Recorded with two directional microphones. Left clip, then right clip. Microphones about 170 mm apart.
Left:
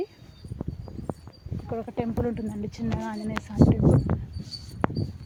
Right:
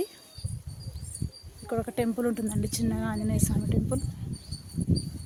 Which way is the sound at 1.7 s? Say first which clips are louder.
Right 2 dB; 25° right (ahead or behind).